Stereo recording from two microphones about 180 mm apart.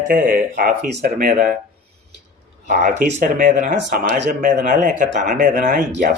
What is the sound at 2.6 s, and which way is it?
Speech, 45° right (ahead or behind).